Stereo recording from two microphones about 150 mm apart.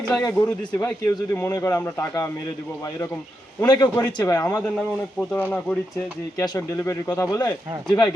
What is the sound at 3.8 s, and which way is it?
Speech, 10° left (ahead or behind).